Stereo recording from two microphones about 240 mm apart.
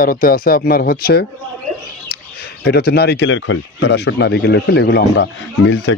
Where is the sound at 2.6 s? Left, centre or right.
Left.